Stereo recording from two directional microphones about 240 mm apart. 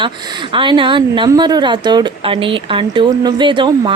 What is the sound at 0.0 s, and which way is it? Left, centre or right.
Speech, centre.